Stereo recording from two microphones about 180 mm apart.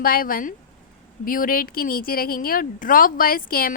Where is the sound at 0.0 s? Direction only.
55° left (ahead or behind).